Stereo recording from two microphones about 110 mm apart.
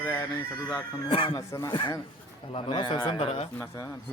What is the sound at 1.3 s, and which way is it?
Speech, 30° left (ahead or behind).